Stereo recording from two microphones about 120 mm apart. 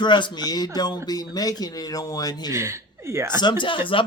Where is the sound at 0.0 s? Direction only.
40° left (ahead or behind).